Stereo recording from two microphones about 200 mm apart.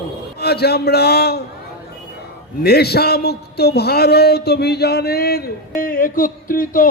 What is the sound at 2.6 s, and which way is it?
Speech, 50° left (ahead or behind).